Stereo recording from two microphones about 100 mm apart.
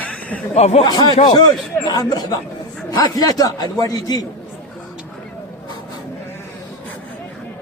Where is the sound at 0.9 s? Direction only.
45° left (ahead or behind).